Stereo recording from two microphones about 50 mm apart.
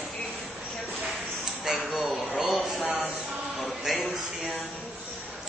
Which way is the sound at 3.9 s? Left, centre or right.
Centre.